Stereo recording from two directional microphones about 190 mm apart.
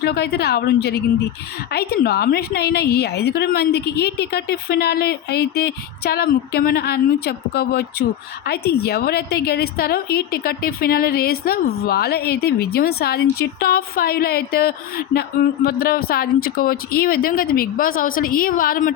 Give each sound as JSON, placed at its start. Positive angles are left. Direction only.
{"t": 0.0, "sound": "a woman's voice", "side_deg": 60}